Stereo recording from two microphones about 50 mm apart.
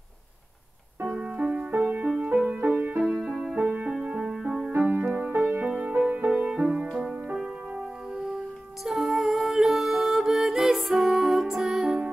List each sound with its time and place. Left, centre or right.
1.1 s music: centre
3.0 s music: centre
4.3 s music: centre
4.7 s music: right; by 7.2 s centre
8.8 s music: centre